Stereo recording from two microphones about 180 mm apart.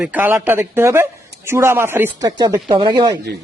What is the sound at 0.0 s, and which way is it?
A man's voice, 10° right (ahead or behind).